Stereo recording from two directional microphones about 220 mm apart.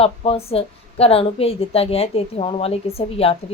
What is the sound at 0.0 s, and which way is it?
A woman's voice, 25° left (ahead or behind).